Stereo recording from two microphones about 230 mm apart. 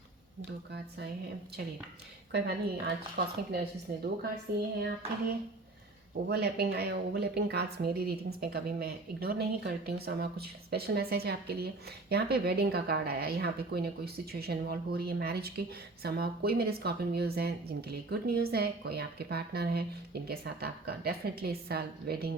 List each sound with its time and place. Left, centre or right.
2.3 s a woman's voice: right
6.2 s a woman's voice: right